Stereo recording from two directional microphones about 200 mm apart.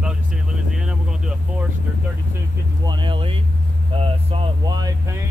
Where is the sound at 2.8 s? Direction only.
25° right (ahead or behind).